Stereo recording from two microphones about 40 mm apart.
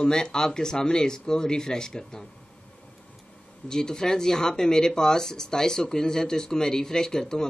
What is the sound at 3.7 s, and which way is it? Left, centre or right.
Speech, centre.